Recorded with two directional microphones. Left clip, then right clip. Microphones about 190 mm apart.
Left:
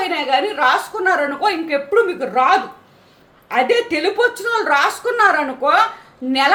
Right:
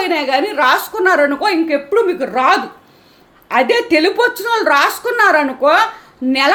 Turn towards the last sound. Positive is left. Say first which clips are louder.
# right 4 dB
turn(degrees=-30)  # may be behind; listen again after turning